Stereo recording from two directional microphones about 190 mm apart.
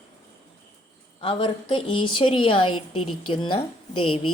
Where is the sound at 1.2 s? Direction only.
25° left (ahead or behind).